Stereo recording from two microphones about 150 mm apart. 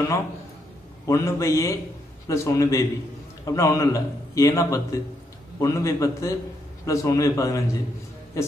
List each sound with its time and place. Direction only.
1.0 s a man's voice: 20° left (ahead or behind)